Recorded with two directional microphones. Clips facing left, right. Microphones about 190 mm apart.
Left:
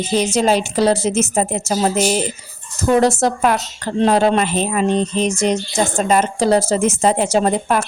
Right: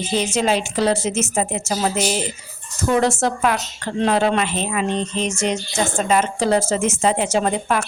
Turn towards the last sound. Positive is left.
turn(degrees=40)  # may be behind; listen again after turning